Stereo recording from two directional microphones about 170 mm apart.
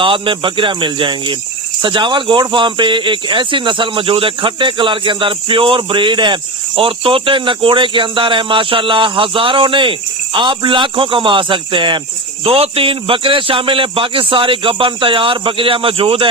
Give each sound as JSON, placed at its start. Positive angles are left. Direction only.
{"t": 0.0, "sound": "speech", "side_deg": -30}